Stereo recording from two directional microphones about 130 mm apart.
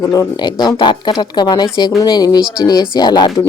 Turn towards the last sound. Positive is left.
turn(degrees=30)  # may be behind; listen again after turning